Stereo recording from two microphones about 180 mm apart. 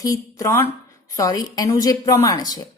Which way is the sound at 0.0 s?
20° left (ahead or behind).